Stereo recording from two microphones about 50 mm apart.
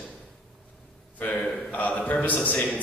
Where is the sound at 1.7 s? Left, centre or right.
Left.